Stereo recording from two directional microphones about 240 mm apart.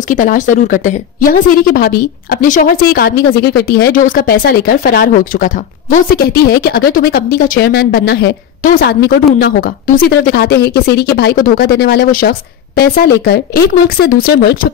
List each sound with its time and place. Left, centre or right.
0.1 s a woman's voice: left